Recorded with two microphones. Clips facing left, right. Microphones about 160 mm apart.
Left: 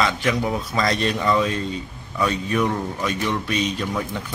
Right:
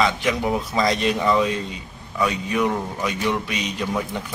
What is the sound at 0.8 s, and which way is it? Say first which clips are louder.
A man's voice: right 1 dB; 15° right (ahead or behind).